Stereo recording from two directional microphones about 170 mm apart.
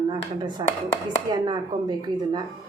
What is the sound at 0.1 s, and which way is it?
Speech, 25° right (ahead or behind).